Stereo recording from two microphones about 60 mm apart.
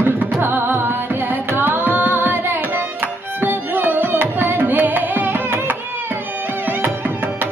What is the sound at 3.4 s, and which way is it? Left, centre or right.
Music, right.